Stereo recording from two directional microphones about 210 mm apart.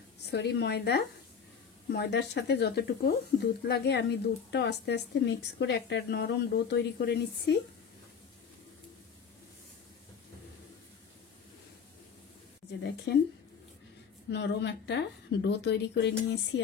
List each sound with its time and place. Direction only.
0.2 s a woman's voice: 50° left (ahead or behind)
12.8 s speech: 55° left (ahead or behind)
14.3 s a woman's voice: 55° left (ahead or behind)